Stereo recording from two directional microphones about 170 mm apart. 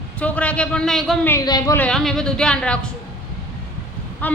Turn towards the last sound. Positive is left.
turn(degrees=10)  # may be behind; listen again after turning